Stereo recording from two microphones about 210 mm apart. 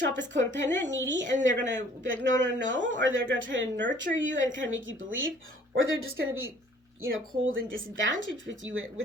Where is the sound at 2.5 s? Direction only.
60° right (ahead or behind).